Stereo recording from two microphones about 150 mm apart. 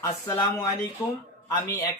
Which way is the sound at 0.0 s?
25° left (ahead or behind).